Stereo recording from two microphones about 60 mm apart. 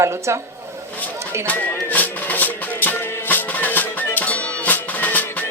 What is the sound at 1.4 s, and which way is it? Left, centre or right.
Music, left.